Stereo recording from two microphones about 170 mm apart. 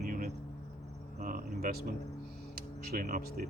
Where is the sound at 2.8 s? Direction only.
60° right (ahead or behind).